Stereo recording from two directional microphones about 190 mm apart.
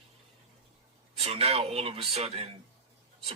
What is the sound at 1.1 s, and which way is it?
A man's voice, 30° right (ahead or behind).